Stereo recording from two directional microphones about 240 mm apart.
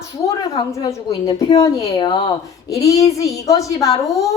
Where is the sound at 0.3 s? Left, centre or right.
Centre.